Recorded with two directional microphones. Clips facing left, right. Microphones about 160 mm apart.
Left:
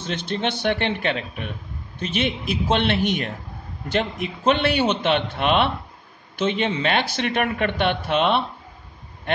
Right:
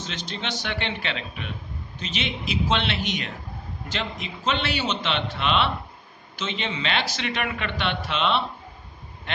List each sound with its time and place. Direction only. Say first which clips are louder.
0.0 s speech: left 8 dB; 55° left (ahead or behind)